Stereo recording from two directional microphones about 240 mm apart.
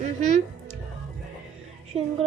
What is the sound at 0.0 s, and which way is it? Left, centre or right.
Speech, right.